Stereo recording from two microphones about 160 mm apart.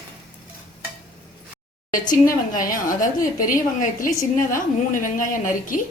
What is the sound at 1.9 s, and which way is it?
Speech, 55° left (ahead or behind).